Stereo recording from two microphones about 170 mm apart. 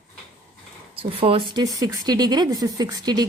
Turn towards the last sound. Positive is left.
turn(degrees=-25)  # may be behind; listen again after turning